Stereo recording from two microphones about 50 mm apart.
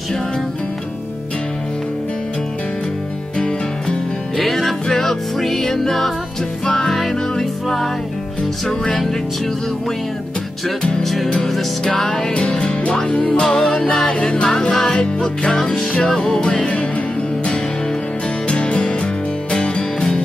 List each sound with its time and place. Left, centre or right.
3.3 s music: centre
4.4 s music: centre
10.8 s music: centre
12.4 s music: left
16.4 s music: left
18.5 s music: centre